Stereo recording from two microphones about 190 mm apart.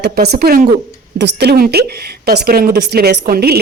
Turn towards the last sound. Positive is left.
turn(degrees=-55)  # may be behind; listen again after turning